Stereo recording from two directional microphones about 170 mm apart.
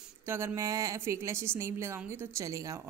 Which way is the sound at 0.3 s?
15° right (ahead or behind).